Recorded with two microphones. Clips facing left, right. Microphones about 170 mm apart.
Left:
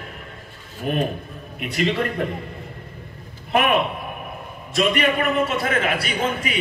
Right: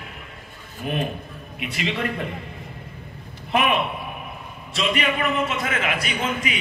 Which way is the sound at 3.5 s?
50° left (ahead or behind).